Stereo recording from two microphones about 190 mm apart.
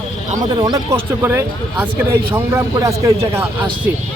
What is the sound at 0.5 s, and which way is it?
Speech, 20° right (ahead or behind).